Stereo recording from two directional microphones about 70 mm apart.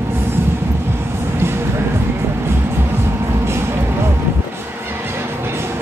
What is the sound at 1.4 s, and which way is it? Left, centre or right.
Music, right.